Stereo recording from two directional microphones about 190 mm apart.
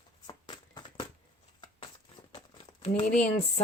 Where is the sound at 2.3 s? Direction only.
30° left (ahead or behind).